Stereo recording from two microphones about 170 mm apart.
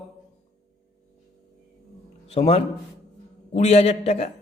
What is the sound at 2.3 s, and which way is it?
A man's voice, 35° left (ahead or behind).